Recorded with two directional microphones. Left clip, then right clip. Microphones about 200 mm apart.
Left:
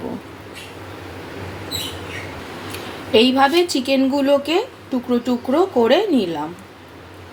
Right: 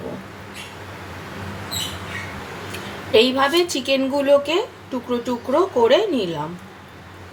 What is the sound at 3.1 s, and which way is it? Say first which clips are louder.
A woman's voice: left 2 dB; 15° left (ahead or behind).